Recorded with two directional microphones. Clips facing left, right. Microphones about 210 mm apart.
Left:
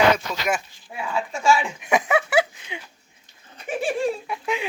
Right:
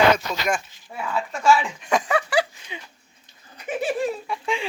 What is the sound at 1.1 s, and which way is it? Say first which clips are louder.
Speech: right 1 dB; 10° left (ahead or behind).